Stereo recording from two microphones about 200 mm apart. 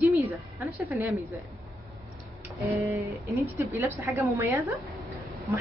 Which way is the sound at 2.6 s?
15° right (ahead or behind).